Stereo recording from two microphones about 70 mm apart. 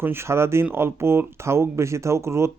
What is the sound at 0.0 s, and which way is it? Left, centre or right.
Speech, right.